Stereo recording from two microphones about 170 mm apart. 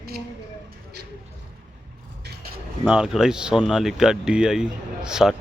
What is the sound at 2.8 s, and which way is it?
Speech, 5° right (ahead or behind).